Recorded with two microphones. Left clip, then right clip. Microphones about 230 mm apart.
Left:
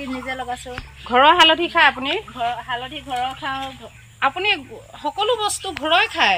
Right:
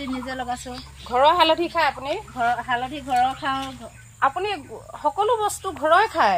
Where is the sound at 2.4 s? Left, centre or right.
Left.